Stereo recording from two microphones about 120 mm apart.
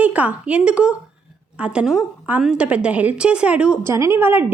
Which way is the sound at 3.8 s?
20° right (ahead or behind).